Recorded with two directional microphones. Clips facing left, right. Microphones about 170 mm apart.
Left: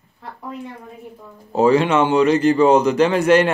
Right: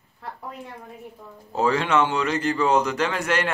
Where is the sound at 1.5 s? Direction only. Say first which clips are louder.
Left 7 dB; 20° left (ahead or behind).